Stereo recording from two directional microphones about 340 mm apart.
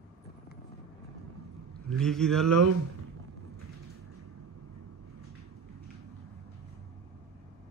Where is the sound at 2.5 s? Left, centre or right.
Right.